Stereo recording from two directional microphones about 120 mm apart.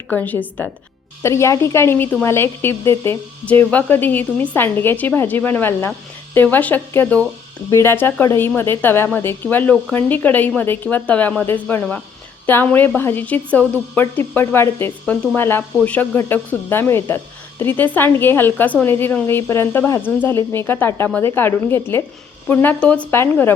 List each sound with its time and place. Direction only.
0.1 s a woman's voice: 15° left (ahead or behind)
1.2 s a woman's voice: 25° left (ahead or behind)